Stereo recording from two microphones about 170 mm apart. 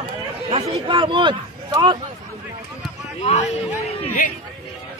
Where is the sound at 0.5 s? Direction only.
35° right (ahead or behind).